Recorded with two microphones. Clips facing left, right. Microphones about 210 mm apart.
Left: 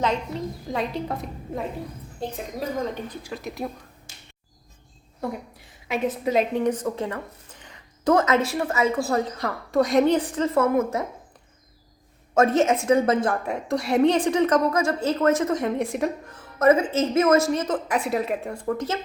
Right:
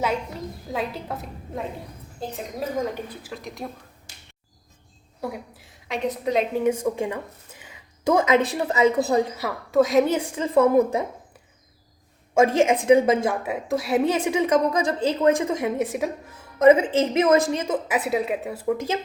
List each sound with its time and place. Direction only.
0.7 s a woman's voice: 5° right (ahead or behind)
5.2 s a woman's voice: 5° right (ahead or behind)
12.3 s a woman's voice: 10° right (ahead or behind)